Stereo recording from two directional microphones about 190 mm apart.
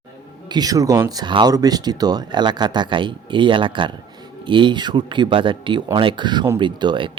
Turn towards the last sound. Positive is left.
turn(degrees=-25)  # may be behind; listen again after turning